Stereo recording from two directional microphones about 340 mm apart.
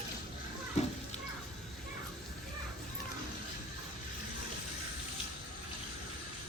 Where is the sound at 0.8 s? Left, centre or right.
Centre.